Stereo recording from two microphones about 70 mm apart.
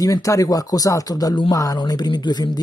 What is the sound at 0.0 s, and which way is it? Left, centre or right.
Speech, left.